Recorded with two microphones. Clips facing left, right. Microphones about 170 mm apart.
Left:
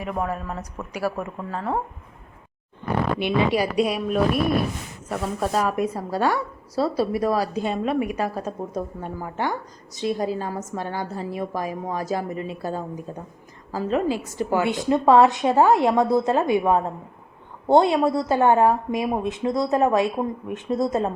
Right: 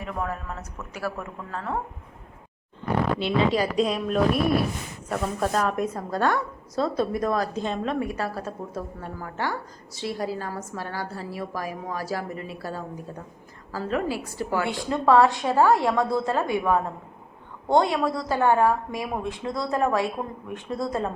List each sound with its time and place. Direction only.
0.0 s speech: 15° left (ahead or behind)
3.2 s a woman's voice: 15° left (ahead or behind)